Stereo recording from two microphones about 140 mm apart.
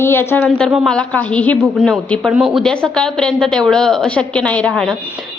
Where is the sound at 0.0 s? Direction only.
15° left (ahead or behind).